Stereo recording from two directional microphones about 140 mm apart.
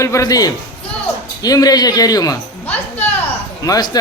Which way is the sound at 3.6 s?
25° left (ahead or behind).